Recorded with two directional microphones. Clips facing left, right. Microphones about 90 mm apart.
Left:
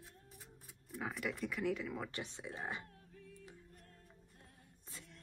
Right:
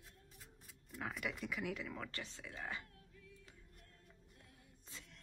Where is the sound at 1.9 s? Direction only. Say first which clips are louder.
Left 4 dB; 20° left (ahead or behind).